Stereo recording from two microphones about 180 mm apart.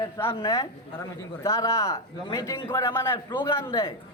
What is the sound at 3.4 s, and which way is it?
Speech, 25° left (ahead or behind).